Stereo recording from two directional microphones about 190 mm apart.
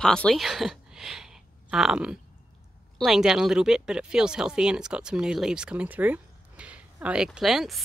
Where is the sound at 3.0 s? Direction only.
Centre (ahead or behind).